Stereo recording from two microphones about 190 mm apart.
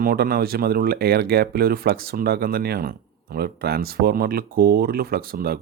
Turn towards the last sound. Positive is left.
turn(degrees=-55)  # may be behind; listen again after turning